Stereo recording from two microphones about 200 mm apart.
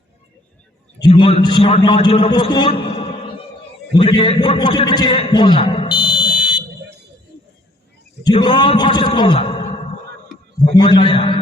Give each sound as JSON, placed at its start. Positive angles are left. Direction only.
{"t": 1.0, "sound": "a man's voice", "side_deg": 25}
{"t": 8.2, "sound": "a man's voice", "side_deg": 20}